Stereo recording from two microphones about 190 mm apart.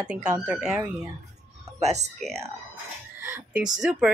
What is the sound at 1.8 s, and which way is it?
Speech, 35° right (ahead or behind).